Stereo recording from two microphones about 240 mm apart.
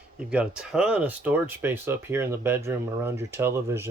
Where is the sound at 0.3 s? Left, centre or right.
Centre.